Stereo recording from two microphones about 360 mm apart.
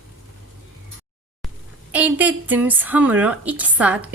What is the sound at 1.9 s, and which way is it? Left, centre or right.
Speech, centre.